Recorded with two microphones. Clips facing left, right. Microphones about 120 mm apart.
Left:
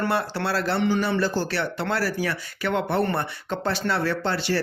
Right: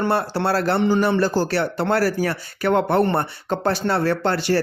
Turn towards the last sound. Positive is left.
turn(degrees=-50)  # may be behind; listen again after turning